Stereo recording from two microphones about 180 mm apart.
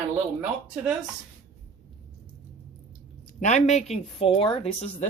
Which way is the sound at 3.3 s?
40° left (ahead or behind).